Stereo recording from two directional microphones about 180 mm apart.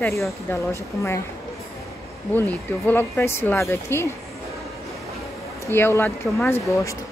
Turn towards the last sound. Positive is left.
turn(degrees=15)  # may be behind; listen again after turning